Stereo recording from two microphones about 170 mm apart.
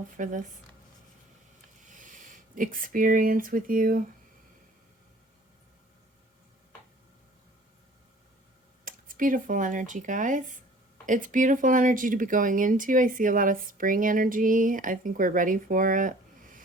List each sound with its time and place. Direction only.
0.2 s speech: 50° right (ahead or behind)
1.9 s speech: 50° right (ahead or behind)
8.8 s speech: 55° right (ahead or behind)